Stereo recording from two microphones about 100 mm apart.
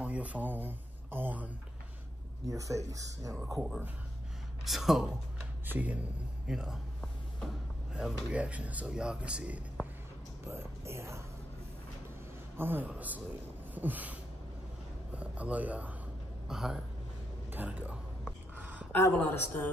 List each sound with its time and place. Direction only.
0.0 s speech: 15° right (ahead or behind)
2.4 s speech: 35° right (ahead or behind)
3.5 s speech: 5° right (ahead or behind)
5.7 s speech: 15° right (ahead or behind)
7.9 s speech: 10° right (ahead or behind)
10.4 s speech: 25° right (ahead or behind)
12.5 s speech: 20° right (ahead or behind)
13.7 s a sound: 15° right (ahead or behind)
15.1 s speech: 15° right (ahead or behind)
16.4 s speech: 5° right (ahead or behind)
17.5 s speech: 15° right (ahead or behind)
18.6 s a sound: 15° right (ahead or behind)
19.1 s a woman's voice: 20° left (ahead or behind)